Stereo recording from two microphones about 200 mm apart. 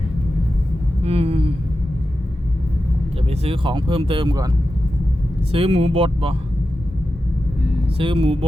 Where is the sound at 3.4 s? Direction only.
25° right (ahead or behind).